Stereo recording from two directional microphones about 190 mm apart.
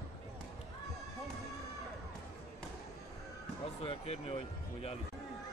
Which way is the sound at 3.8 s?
30° left (ahead or behind).